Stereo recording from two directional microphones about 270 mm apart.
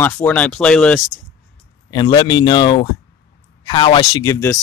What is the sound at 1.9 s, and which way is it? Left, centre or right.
Speech, centre.